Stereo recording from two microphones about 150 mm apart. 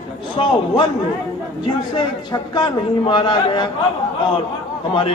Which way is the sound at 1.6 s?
30° left (ahead or behind).